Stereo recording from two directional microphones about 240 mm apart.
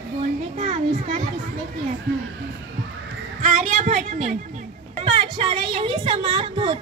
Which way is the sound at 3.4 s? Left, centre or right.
Right.